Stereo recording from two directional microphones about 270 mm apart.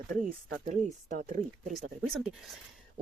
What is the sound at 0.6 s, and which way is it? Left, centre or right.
Speech, right.